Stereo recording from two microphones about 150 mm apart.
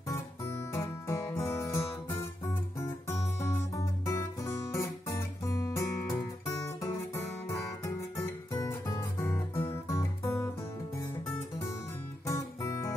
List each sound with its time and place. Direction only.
0.7 s music: 20° left (ahead or behind)
12.3 s music: 20° left (ahead or behind)